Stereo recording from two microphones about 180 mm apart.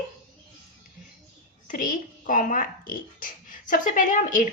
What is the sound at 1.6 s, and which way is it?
Speech, 50° left (ahead or behind).